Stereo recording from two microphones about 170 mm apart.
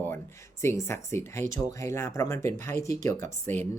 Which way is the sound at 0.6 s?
15° left (ahead or behind).